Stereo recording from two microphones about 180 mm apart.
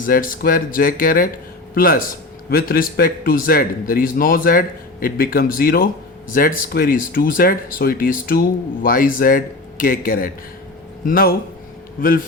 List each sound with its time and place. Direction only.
0.0 s speech: 50° left (ahead or behind)